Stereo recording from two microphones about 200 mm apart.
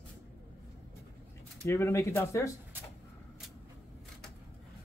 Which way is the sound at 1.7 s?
15° left (ahead or behind).